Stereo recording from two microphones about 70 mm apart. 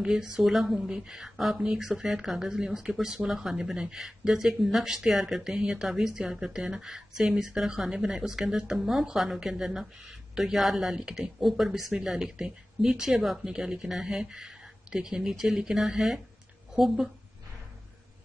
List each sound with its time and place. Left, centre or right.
0.0 s speech: centre